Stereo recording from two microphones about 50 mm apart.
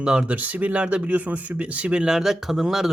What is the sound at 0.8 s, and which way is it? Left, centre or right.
Speech, right.